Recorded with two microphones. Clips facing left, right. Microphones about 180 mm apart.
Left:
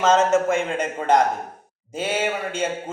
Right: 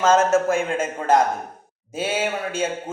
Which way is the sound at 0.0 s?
Centre (ahead or behind).